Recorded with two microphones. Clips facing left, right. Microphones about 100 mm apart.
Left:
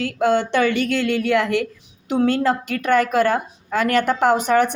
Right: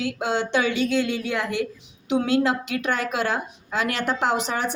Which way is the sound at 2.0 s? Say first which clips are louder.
Left 3 dB; 50° left (ahead or behind).